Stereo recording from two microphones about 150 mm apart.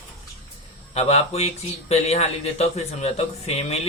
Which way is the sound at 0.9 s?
45° left (ahead or behind).